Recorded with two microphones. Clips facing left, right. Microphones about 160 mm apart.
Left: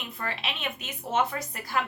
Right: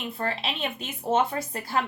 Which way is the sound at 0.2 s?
35° right (ahead or behind).